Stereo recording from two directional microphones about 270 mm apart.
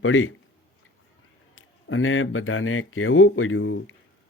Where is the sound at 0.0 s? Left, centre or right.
Left.